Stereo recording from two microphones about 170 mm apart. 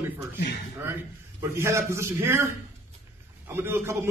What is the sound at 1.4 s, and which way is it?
A man's voice, 15° right (ahead or behind).